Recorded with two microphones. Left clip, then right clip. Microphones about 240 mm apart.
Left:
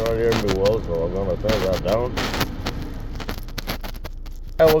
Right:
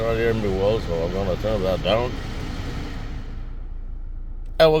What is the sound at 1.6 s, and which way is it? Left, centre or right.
Speech, right.